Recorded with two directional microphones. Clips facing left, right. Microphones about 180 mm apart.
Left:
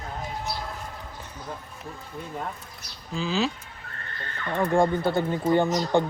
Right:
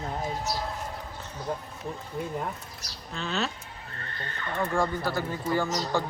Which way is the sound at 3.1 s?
Centre (ahead or behind).